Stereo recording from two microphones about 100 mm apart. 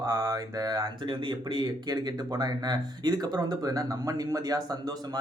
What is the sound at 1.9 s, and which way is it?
Speech, 40° right (ahead or behind).